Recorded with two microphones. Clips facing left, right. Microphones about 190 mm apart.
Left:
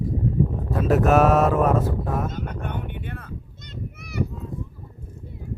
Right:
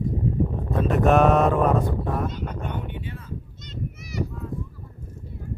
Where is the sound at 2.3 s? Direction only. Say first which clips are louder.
Left 1 dB; 55° left (ahead or behind).